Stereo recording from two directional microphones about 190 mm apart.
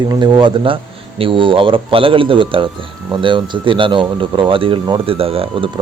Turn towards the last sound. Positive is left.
turn(degrees=-30)  # may be behind; listen again after turning